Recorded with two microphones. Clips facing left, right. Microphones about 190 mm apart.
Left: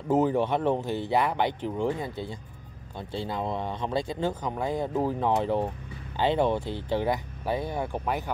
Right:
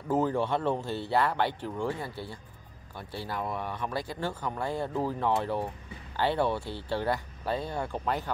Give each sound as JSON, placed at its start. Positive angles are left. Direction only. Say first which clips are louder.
{"t": 0.1, "sound": "speech", "louder": "left 3 dB", "side_deg": 20}